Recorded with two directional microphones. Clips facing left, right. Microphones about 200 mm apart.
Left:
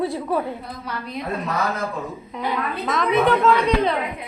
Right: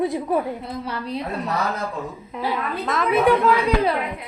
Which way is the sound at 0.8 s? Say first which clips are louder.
Right 3 dB; 30° right (ahead or behind).